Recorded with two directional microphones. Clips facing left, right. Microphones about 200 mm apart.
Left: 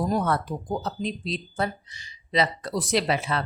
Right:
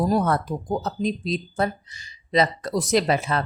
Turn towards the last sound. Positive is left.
turn(degrees=-45)  # may be behind; listen again after turning